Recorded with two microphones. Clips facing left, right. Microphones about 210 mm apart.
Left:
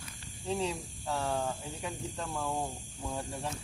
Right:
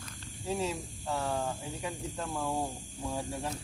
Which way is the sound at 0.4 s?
5° right (ahead or behind).